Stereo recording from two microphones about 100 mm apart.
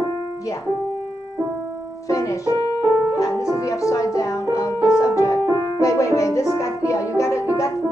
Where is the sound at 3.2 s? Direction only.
30° left (ahead or behind).